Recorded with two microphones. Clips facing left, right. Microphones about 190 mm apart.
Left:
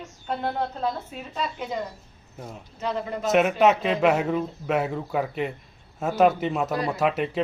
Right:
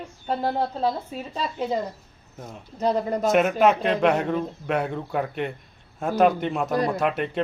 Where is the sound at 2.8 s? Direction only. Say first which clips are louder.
Right 6 dB; 40° right (ahead or behind).